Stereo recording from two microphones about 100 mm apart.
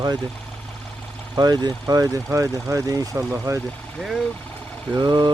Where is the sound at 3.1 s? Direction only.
20° right (ahead or behind).